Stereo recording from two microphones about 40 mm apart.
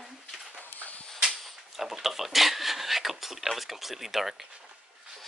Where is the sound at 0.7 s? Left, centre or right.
Left.